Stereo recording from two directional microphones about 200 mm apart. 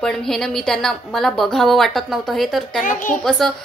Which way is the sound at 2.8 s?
40° left (ahead or behind).